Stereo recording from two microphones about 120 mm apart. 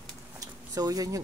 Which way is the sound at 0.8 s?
30° right (ahead or behind).